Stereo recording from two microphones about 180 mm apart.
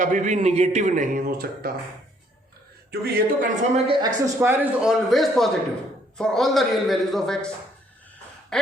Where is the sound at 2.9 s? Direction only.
60° right (ahead or behind).